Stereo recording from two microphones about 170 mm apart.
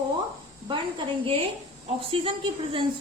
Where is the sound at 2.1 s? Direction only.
30° right (ahead or behind).